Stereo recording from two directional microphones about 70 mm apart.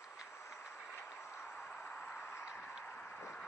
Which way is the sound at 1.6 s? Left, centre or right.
Centre.